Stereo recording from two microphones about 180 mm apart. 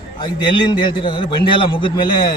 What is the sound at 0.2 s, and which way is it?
A man's voice, 25° left (ahead or behind).